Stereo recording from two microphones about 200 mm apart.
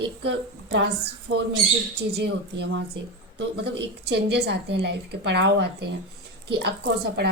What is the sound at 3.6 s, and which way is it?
A woman's voice, 55° right (ahead or behind).